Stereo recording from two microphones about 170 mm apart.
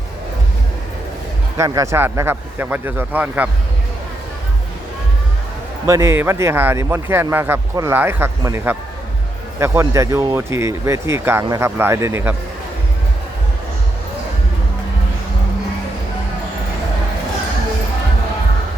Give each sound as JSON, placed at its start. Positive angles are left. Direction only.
{"t": 1.5, "sound": "speech", "side_deg": -20}
{"t": 5.8, "sound": "speech", "side_deg": -15}